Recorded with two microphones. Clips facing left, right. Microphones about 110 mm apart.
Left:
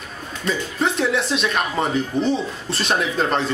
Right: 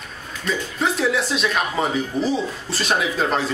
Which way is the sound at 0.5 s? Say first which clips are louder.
Left 1 dB; centre (ahead or behind).